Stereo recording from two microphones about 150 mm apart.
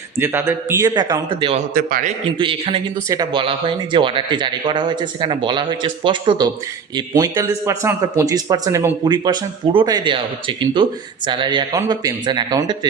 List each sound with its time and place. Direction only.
0.2 s speech: 15° right (ahead or behind); by 1.5 s 35° right (ahead or behind)
1.7 s a man's voice: 65° right (ahead or behind)
2.4 s speech: 35° right (ahead or behind)
3.1 s speech: 25° right (ahead or behind)